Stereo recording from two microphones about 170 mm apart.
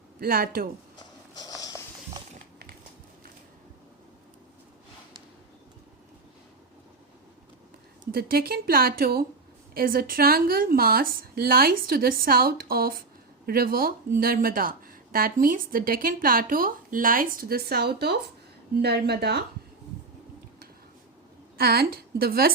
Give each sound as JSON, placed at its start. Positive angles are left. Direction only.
{"t": 0.2, "sound": "speech", "side_deg": -60}
{"t": 0.9, "sound": "a sound", "side_deg": 20}
{"t": 8.1, "sound": "a woman's voice", "side_deg": -60}
{"t": 21.6, "sound": "speech", "side_deg": -65}